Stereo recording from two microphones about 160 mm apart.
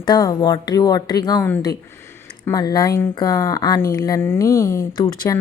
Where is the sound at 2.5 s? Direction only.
25° left (ahead or behind).